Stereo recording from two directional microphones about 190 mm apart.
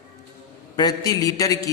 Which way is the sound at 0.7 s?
20° left (ahead or behind).